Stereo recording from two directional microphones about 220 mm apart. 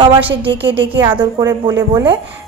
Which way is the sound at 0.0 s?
25° right (ahead or behind).